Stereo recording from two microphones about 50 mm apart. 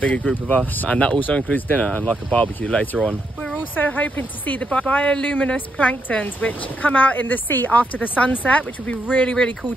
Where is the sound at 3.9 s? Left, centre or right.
Left.